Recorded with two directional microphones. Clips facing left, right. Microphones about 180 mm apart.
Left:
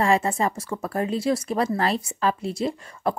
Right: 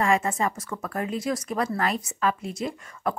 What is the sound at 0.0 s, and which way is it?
A woman's voice, 30° left (ahead or behind).